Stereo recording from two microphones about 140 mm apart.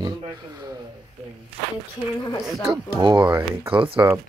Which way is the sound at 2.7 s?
35° right (ahead or behind).